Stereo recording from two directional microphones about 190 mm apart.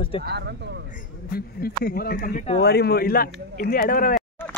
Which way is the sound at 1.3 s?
55° left (ahead or behind).